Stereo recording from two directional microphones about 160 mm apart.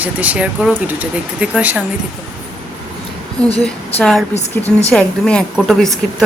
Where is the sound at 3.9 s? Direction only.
5° left (ahead or behind).